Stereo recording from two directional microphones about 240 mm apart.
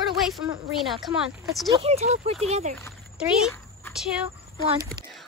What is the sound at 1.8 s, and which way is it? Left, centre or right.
Speech, right.